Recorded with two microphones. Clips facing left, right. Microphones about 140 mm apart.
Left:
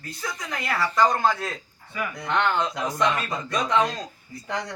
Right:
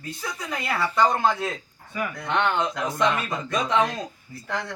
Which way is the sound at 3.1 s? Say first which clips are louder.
Right 1 dB; centre (ahead or behind).